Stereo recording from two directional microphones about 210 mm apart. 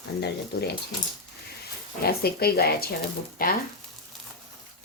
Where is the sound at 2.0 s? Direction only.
45° left (ahead or behind).